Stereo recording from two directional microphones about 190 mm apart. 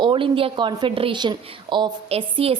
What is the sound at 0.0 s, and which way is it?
A woman's voice, 25° right (ahead or behind).